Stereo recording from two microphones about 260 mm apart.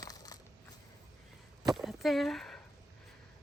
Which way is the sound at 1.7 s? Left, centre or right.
Centre.